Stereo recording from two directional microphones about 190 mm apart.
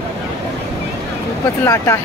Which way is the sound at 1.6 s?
15° left (ahead or behind).